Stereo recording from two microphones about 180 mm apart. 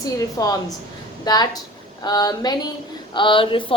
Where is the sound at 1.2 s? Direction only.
20° left (ahead or behind).